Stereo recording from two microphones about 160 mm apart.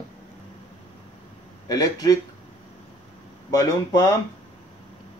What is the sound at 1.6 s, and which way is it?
Speech, 25° left (ahead or behind).